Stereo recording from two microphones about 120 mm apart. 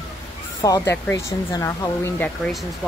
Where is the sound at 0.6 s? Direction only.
25° left (ahead or behind).